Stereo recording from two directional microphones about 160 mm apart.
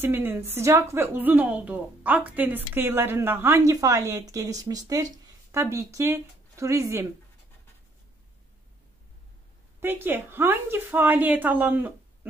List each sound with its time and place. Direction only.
0.0 s a woman's voice: 15° right (ahead or behind)
9.8 s a woman's voice: 15° right (ahead or behind)